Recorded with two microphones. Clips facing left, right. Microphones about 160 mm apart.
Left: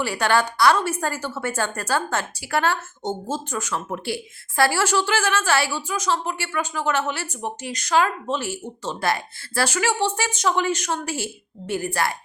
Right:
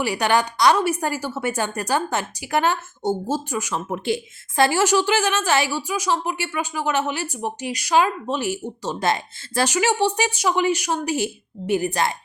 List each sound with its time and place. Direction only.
0.0 s a woman's voice: 15° right (ahead or behind)